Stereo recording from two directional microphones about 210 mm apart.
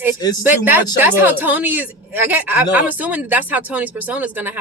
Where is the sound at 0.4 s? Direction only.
10° right (ahead or behind).